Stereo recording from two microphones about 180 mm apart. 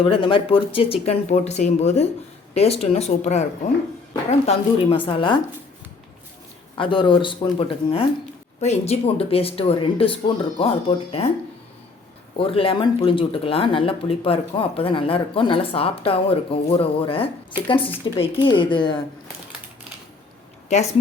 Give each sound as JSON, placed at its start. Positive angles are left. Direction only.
{"t": 0.0, "sound": "speech", "side_deg": 30}
{"t": 6.7, "sound": "speech", "side_deg": 25}
{"t": 12.4, "sound": "speech", "side_deg": 30}
{"t": 20.7, "sound": "speech", "side_deg": 35}